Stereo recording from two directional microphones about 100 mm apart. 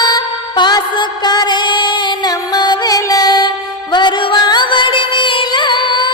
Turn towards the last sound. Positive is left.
turn(degrees=50)  # may be behind; listen again after turning